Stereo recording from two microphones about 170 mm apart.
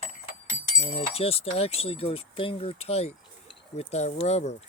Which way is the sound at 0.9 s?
35° left (ahead or behind).